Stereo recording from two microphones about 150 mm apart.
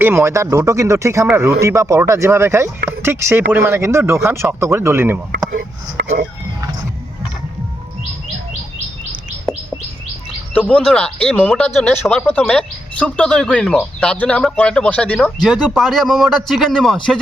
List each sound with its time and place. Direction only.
0.0 s speech: 15° right (ahead or behind)
5.5 s speech: 85° right
10.5 s speech: 10° left (ahead or behind)